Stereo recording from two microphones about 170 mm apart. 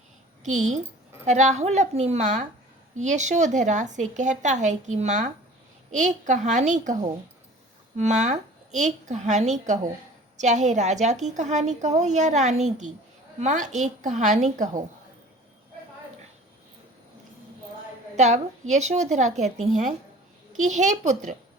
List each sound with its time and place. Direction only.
0.4 s a woman's voice: 45° right (ahead or behind)
18.2 s a woman's voice: 45° right (ahead or behind)